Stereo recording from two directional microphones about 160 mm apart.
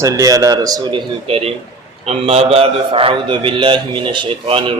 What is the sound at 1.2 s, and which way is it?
A man's voice, 40° right (ahead or behind).